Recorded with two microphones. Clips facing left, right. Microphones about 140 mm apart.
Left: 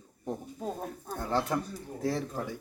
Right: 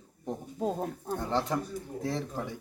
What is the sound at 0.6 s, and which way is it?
Speech, 20° right (ahead or behind).